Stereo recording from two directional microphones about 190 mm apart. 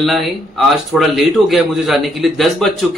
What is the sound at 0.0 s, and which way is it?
A man's voice, centre (ahead or behind).